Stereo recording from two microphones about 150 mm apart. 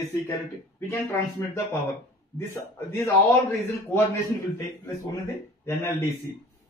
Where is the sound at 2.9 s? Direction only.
15° left (ahead or behind).